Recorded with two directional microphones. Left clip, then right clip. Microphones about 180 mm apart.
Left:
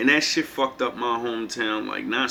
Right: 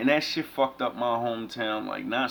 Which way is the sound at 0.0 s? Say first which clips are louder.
Left 5 dB; 55° right (ahead or behind).